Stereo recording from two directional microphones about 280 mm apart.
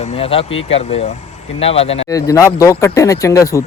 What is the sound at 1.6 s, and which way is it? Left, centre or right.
Speech, left.